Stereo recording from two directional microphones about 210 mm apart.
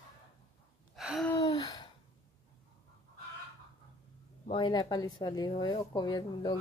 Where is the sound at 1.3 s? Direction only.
20° left (ahead or behind).